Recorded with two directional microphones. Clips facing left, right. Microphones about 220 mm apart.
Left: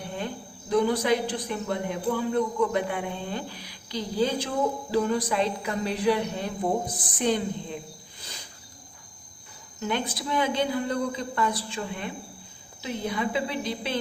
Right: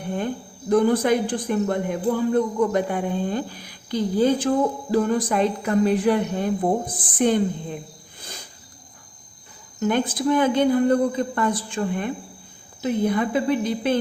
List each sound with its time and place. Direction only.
0.7 s a man's voice: 50° right (ahead or behind)
9.8 s a man's voice: 50° right (ahead or behind)